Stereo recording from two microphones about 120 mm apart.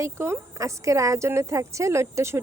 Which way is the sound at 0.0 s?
25° right (ahead or behind).